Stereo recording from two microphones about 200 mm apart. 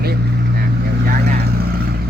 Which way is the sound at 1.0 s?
50° right (ahead or behind).